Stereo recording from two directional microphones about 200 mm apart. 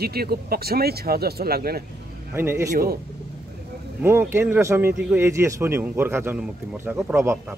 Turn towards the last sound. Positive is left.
turn(degrees=-10)  # may be behind; listen again after turning